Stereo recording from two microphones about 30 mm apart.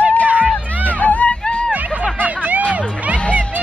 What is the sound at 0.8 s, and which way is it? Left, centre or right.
Hubbub, left.